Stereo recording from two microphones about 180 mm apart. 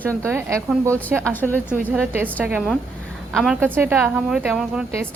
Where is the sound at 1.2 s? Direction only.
10° left (ahead or behind).